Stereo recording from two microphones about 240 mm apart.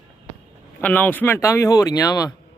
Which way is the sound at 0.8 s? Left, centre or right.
Centre.